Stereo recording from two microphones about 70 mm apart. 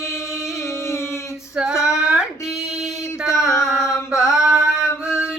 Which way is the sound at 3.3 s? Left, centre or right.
Left.